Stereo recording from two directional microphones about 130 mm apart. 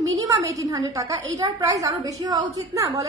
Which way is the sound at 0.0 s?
25° right (ahead or behind).